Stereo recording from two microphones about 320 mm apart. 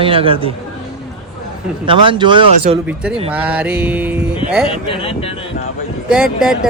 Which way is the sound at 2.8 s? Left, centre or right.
Centre.